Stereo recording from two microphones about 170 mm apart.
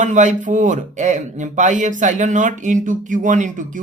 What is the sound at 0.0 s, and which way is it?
Speech, 45° right (ahead or behind).